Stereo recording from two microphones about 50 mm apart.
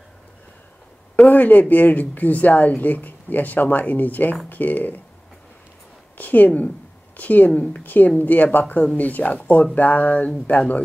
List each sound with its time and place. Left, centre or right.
1.3 s speech: left
6.1 s speech: left